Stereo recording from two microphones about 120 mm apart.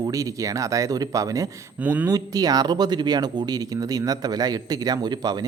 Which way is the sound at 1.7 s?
15° right (ahead or behind).